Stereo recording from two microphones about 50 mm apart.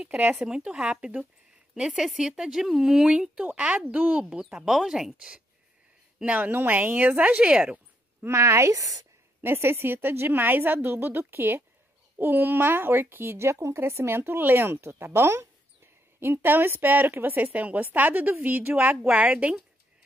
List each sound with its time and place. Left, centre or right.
0.7 s speech: right
3.1 s a woman's voice: centre
4.2 s speech: centre
6.2 s speech: right
6.5 s a woman's voice: right
7.6 s a sound: right
8.3 s speech: right
9.4 s a woman's voice: right
13.5 s a woman's voice: right